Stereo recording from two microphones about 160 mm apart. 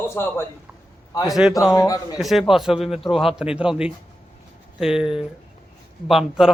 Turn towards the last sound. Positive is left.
turn(degrees=0)  # may be behind; listen again after turning